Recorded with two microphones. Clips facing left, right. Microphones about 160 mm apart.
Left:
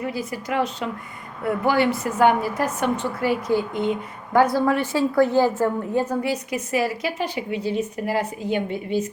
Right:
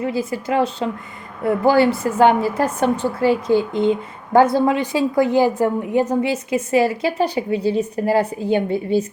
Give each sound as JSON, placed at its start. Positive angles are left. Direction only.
{"t": 0.0, "sound": "a woman's voice", "side_deg": -25}